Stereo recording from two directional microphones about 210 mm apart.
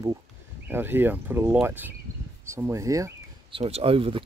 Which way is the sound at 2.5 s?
10° right (ahead or behind).